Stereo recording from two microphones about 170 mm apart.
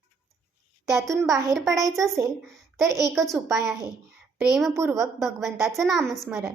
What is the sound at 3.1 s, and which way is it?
Speech, centre (ahead or behind).